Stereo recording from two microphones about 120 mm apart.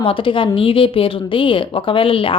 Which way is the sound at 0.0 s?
45° left (ahead or behind).